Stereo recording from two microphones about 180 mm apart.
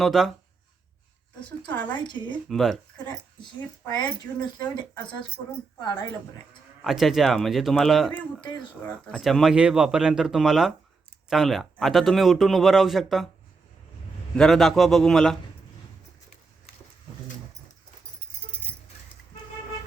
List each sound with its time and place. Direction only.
0.0 s speech: centre (ahead or behind)
2.2 s speech: 5° left (ahead or behind)
4.0 s speech: 25° left (ahead or behind)
6.8 s speech: centre (ahead or behind)
8.4 s speech: 25° left (ahead or behind)
9.1 s speech: centre (ahead or behind)
14.3 s speech: centre (ahead or behind)